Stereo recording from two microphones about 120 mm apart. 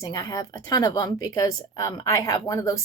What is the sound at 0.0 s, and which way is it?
A woman's voice, 30° left (ahead or behind).